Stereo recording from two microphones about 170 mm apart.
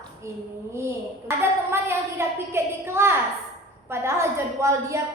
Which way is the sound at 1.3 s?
15° right (ahead or behind).